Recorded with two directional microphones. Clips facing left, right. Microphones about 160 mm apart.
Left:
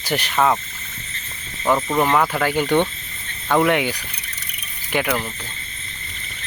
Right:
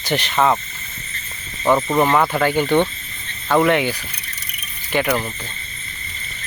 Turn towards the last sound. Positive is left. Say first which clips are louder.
# right 2 dB
turn(degrees=5)  # may be behind; listen again after turning